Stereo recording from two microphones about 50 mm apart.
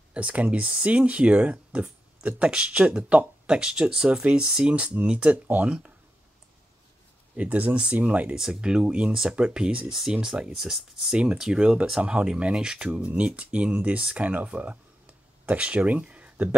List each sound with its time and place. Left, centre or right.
0.1 s speech: right
7.3 s speech: right
8.4 s speech: centre
10.5 s speech: centre; by 16.5 s right